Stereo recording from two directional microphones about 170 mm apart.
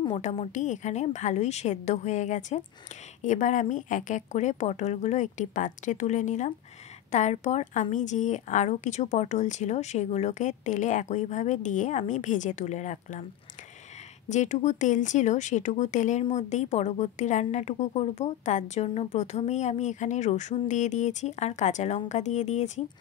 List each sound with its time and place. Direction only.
0.1 s speech: 40° left (ahead or behind)
14.3 s speech: 45° left (ahead or behind)